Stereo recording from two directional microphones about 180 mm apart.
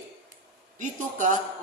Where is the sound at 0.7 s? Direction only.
45° right (ahead or behind).